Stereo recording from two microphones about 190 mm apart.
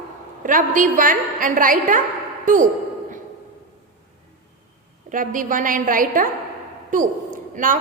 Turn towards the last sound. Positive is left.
turn(degrees=-45)  # may be behind; listen again after turning